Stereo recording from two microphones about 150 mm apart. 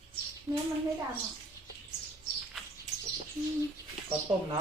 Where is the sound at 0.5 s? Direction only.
20° right (ahead or behind).